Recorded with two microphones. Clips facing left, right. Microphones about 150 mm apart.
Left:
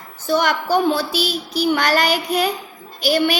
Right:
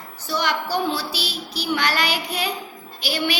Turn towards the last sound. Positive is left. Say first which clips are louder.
# left 7 dB
turn(degrees=45)  # may be behind; listen again after turning